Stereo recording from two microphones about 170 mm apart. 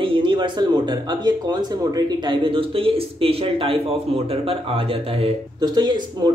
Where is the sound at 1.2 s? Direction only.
25° right (ahead or behind).